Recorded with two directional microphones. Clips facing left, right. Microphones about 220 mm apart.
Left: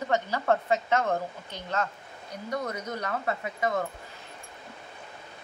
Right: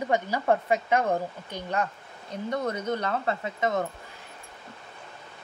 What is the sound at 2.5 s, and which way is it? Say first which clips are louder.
Speech: right 4 dB; 30° right (ahead or behind).